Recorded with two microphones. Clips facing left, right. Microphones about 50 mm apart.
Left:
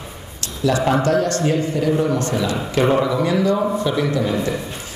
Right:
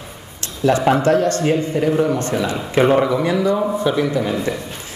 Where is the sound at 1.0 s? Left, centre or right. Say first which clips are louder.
Right 2 dB; right.